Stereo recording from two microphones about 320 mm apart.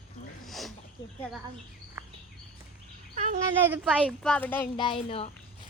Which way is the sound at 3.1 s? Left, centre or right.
Right.